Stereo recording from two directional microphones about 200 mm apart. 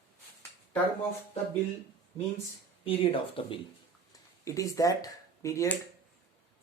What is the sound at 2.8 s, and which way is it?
Speech, 30° left (ahead or behind).